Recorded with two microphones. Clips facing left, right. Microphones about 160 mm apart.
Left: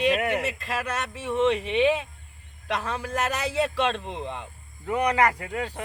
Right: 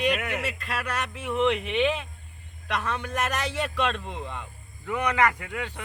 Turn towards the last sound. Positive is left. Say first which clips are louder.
# left 3 dB
turn(degrees=35)  # may be behind; listen again after turning